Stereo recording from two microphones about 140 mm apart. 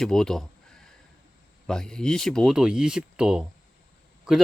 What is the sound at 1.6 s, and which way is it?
Speech, 5° left (ahead or behind).